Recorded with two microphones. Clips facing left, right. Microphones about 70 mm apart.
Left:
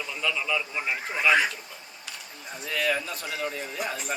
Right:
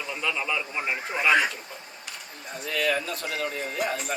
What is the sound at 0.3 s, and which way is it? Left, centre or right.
Speech, centre.